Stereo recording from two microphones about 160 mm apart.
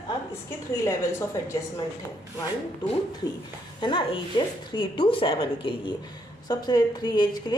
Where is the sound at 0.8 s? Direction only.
20° left (ahead or behind).